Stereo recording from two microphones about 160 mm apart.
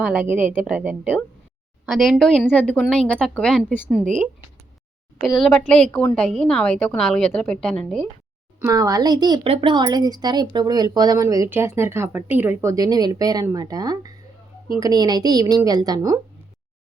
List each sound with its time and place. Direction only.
0.0 s a woman's voice: 10° right (ahead or behind)
1.9 s a woman's voice: centre (ahead or behind)
4.0 s speech: 50° right (ahead or behind)
5.3 s a woman's voice: 5° left (ahead or behind)
8.6 s speech: 20° right (ahead or behind)